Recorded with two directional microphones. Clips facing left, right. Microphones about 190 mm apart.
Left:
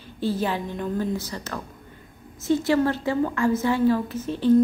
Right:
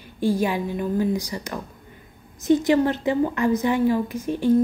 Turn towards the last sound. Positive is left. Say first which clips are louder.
# left 1 dB
turn(degrees=-10)  # may be behind; listen again after turning